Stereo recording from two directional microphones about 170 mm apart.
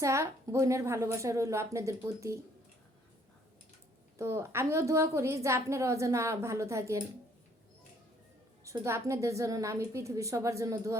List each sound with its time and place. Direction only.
0.0 s a woman's voice: 15° right (ahead or behind)
4.2 s a woman's voice: 15° right (ahead or behind)
8.6 s a woman's voice: 15° right (ahead or behind)